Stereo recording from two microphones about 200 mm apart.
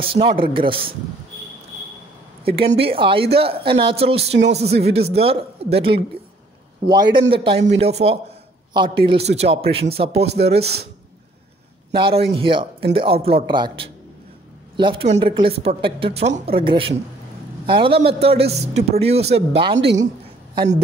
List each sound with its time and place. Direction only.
0.0 s a man's voice: 25° right (ahead or behind)
2.4 s a man's voice: 30° right (ahead or behind)
11.9 s a man's voice: 25° right (ahead or behind)